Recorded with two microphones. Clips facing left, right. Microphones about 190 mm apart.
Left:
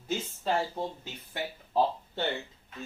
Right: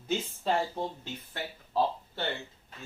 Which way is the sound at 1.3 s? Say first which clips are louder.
Left 3 dB; 15° left (ahead or behind).